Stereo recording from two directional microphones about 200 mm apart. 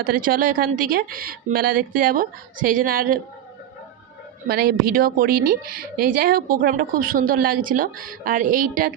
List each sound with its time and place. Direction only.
0.0 s a woman's voice: 45° right (ahead or behind)
4.4 s a woman's voice: 50° right (ahead or behind)